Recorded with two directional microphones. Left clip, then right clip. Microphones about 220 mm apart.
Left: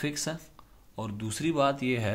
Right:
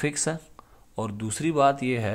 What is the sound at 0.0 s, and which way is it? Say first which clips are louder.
Speech: right 5 dB; 30° right (ahead or behind).